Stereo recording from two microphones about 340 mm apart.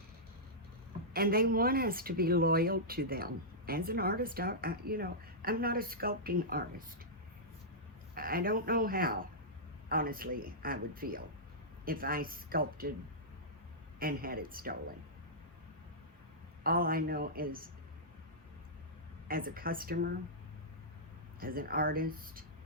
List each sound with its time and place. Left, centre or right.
1.1 s speech: right
8.1 s speech: right
14.0 s speech: right
16.6 s speech: right
19.3 s speech: right
21.4 s speech: right